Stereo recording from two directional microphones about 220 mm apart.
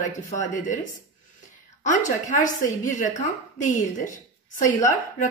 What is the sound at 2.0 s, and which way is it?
A woman's voice, 35° left (ahead or behind).